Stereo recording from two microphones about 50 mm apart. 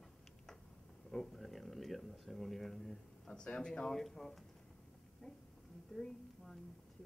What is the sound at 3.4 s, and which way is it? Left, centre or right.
Speech, centre.